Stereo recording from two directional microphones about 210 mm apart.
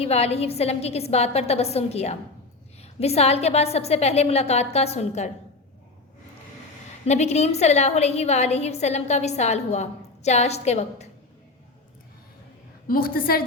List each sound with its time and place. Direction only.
0.0 s a woman's voice: 30° left (ahead or behind)
7.0 s a woman's voice: 30° left (ahead or behind)
12.9 s a woman's voice: 45° left (ahead or behind)